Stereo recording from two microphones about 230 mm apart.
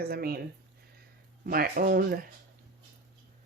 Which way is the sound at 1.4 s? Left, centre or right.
Right.